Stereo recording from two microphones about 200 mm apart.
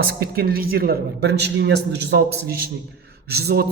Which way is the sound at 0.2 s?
50° right (ahead or behind).